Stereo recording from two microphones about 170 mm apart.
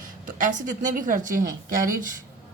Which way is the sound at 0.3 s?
50° right (ahead or behind).